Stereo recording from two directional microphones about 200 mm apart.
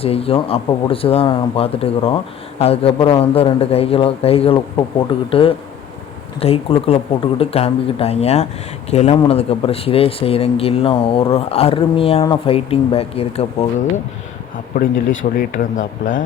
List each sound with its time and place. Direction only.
0.0 s speech: 30° left (ahead or behind)
15.4 s speech: 40° left (ahead or behind)